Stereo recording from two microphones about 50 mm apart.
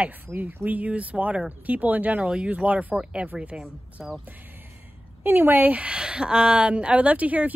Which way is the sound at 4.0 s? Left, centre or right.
Centre.